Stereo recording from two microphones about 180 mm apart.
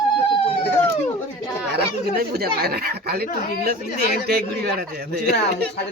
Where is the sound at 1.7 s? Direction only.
60° right (ahead or behind).